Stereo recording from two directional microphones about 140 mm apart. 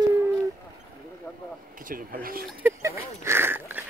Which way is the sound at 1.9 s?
90° right.